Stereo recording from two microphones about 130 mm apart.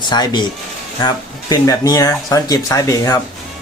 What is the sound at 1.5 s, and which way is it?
Speech, 30° left (ahead or behind).